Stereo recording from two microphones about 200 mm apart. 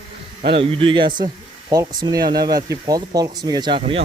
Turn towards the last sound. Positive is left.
turn(degrees=-25)  # may be behind; listen again after turning